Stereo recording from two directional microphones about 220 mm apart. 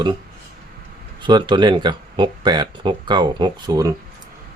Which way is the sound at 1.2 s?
20° right (ahead or behind).